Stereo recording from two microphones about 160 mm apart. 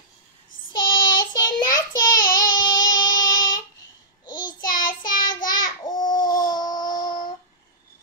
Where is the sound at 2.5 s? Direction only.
25° left (ahead or behind).